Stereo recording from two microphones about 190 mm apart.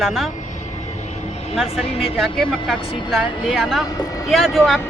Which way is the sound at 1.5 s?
Centre (ahead or behind).